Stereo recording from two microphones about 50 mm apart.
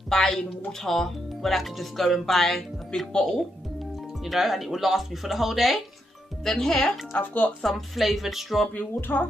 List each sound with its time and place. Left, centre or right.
0.1 s speech: centre
4.2 s speech: centre
6.4 s speech: centre
7.2 s speech: left
7.6 s speech: centre
9.0 s speech: left